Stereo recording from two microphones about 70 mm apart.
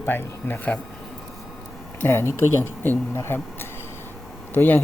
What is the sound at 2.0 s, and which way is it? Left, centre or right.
Speech, left.